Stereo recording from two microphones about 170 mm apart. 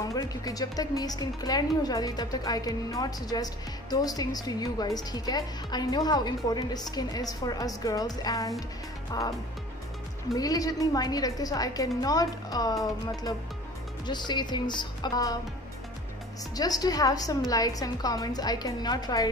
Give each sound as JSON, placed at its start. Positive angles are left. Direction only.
{"t": 0.0, "sound": "a woman's voice", "side_deg": 20}
{"t": 10.3, "sound": "a woman's voice", "side_deg": 20}
{"t": 14.0, "sound": "a woman's voice", "side_deg": 25}
{"t": 16.5, "sound": "a woman's voice", "side_deg": 20}